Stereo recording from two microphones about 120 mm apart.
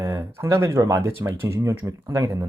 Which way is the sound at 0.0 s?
30° right (ahead or behind).